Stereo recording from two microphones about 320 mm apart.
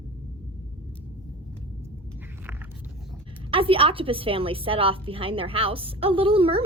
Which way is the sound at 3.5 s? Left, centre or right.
Centre.